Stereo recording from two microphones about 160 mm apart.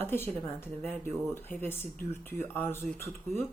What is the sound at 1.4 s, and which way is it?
Speech, 15° left (ahead or behind).